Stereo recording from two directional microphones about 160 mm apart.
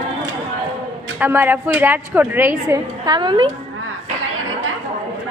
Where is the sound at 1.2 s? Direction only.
15° right (ahead or behind).